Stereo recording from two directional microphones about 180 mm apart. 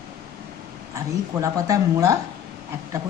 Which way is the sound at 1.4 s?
20° right (ahead or behind).